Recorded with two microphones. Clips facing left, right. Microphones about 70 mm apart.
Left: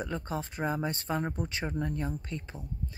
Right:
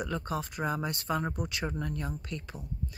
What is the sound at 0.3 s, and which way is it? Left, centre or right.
Speech, left.